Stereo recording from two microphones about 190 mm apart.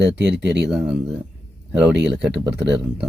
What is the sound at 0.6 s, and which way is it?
Speech, 5° right (ahead or behind).